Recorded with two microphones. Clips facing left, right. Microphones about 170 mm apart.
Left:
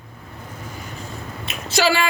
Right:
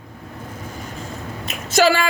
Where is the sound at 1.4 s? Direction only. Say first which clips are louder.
Right 4 dB; 45° right (ahead or behind).